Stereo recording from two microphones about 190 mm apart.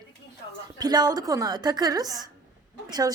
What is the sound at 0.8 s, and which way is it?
A woman's voice, 20° right (ahead or behind).